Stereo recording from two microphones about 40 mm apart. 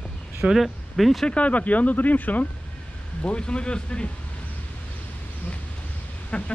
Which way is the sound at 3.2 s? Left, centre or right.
Left.